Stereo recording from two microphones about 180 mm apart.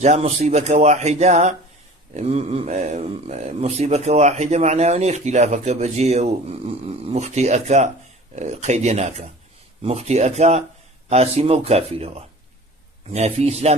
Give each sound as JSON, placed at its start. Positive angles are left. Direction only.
{"t": 0.0, "sound": "speech", "side_deg": -40}